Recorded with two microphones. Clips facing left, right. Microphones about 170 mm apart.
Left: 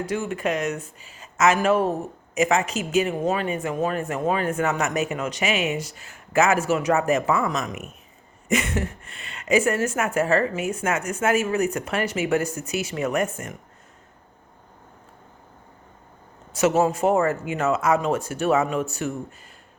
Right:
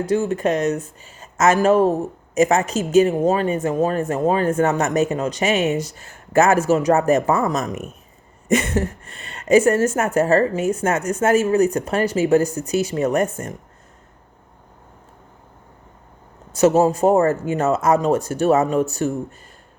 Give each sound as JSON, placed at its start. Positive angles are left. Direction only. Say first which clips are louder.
{"t": 0.1, "sound": "speech", "louder": "right 8 dB", "side_deg": -40}
{"t": 16.5, "sound": "speech", "louder": "right 5 dB", "side_deg": -40}